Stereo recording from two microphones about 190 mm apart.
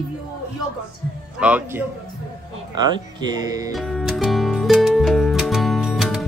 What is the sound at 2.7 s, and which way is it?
Speech, 20° right (ahead or behind).